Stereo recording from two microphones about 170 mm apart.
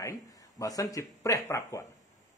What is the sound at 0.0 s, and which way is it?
Speech, 20° left (ahead or behind).